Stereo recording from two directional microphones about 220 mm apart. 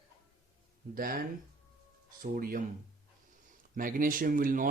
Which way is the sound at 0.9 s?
40° right (ahead or behind).